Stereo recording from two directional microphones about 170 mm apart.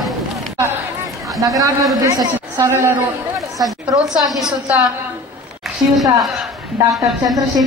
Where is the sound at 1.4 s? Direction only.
20° right (ahead or behind).